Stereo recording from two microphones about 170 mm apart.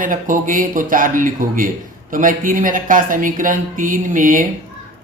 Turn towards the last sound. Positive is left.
turn(degrees=-50)  # may be behind; listen again after turning